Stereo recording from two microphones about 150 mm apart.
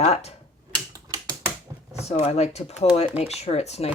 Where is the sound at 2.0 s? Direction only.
45° left (ahead or behind).